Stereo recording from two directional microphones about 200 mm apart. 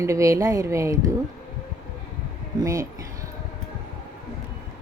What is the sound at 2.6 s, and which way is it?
Speech, 15° right (ahead or behind).